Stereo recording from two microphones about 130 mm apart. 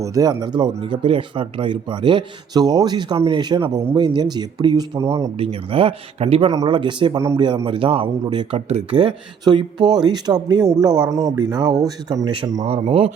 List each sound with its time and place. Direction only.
0.0 s speech: 25° right (ahead or behind)
5.4 s speech: 45° right (ahead or behind)
6.7 s speech: 40° right (ahead or behind)
7.2 s speech: 20° right (ahead or behind)
7.4 s speech: 35° right (ahead or behind)
9.4 s speech: 35° right (ahead or behind)
12.5 s speech: 50° right (ahead or behind)